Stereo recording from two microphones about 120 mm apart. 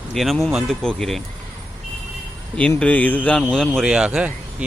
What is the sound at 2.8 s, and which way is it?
Speech, 10° left (ahead or behind).